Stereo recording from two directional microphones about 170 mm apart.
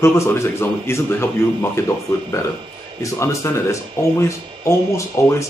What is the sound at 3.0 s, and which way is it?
Speech, 15° left (ahead or behind).